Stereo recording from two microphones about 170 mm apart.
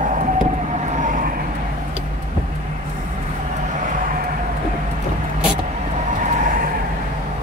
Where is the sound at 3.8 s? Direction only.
50° right (ahead or behind).